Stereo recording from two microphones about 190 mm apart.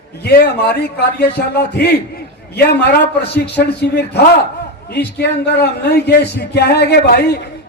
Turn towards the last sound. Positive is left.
turn(degrees=60)  # may be behind; listen again after turning